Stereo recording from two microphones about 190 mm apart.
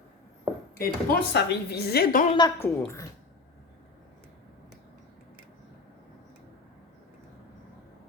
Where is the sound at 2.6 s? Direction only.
10° left (ahead or behind).